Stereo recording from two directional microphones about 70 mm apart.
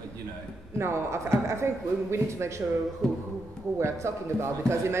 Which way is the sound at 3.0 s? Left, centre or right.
Centre.